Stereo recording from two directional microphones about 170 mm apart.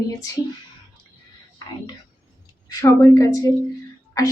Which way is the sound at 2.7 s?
20° left (ahead or behind).